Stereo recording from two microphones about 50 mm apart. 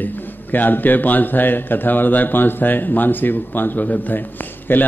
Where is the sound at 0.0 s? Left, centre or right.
Left.